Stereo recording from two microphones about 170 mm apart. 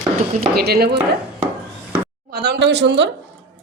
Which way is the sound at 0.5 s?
65° right (ahead or behind).